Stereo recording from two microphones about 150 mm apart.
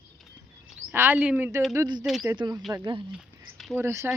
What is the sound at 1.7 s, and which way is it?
Speech, 20° right (ahead or behind).